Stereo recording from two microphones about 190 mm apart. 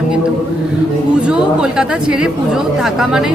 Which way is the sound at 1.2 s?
5° right (ahead or behind).